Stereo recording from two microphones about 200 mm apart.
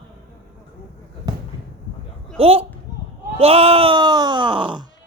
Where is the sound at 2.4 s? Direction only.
30° right (ahead or behind).